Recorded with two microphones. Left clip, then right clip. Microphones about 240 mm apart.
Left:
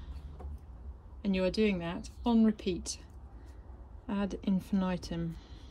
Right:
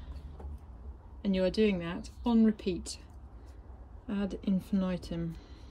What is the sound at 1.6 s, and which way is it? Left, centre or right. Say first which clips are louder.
Speech: right 1 dB; centre.